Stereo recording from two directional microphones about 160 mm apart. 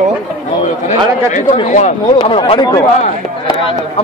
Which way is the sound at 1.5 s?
50° left (ahead or behind).